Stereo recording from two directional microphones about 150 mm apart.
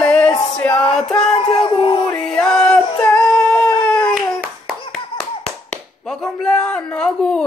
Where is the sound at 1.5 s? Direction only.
35° left (ahead or behind).